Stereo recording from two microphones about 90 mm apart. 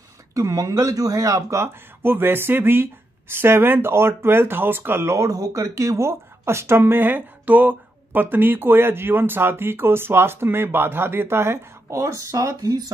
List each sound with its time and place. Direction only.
0.3 s speech: 35° right (ahead or behind)